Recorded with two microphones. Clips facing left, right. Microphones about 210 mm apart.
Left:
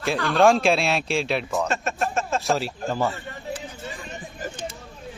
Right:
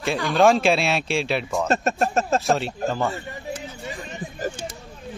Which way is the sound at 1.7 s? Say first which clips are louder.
Right 4 dB; 40° right (ahead or behind).